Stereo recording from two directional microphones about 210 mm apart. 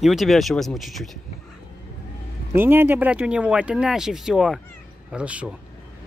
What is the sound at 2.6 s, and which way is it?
Speech, 10° right (ahead or behind).